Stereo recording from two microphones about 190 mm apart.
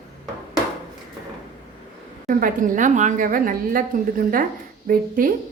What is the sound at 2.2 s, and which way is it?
A woman's voice, 45° right (ahead or behind).